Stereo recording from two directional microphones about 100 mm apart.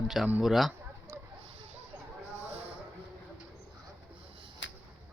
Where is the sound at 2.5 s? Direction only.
90° right.